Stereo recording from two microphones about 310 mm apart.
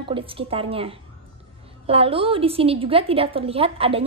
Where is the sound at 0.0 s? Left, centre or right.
Centre.